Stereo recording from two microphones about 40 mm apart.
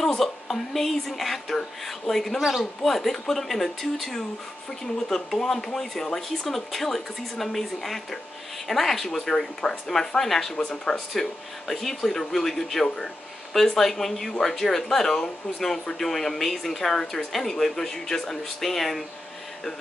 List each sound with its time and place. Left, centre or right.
0.0 s a woman's voice: centre
2.9 s a woman's voice: centre
10.5 s speech: centre
11.1 s speech: centre